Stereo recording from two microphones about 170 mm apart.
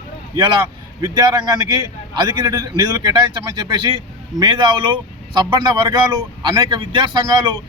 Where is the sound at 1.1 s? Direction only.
25° right (ahead or behind).